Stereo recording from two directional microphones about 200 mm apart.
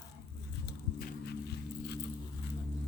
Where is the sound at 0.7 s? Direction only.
55° left (ahead or behind).